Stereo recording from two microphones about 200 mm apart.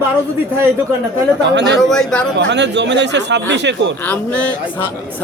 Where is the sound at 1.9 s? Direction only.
5° left (ahead or behind).